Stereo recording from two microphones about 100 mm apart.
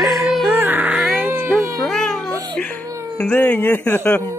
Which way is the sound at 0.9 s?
Centre (ahead or behind).